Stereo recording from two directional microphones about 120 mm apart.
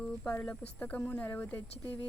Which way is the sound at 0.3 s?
10° left (ahead or behind).